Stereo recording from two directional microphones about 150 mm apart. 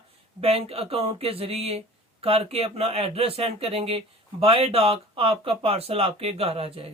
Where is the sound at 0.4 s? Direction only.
40° right (ahead or behind).